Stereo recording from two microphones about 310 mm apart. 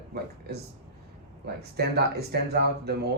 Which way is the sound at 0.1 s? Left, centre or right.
Right.